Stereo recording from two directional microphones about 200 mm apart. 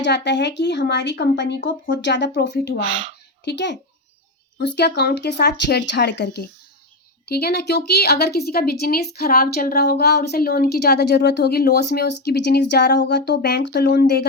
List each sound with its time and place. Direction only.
0.0 s a woman's voice: 60° left (ahead or behind)